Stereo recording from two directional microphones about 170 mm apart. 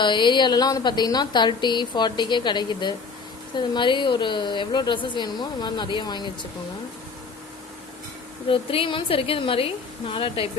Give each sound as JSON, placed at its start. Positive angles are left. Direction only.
{"t": 0.0, "sound": "a woman's voice", "side_deg": 25}
{"t": 8.4, "sound": "a woman's voice", "side_deg": 30}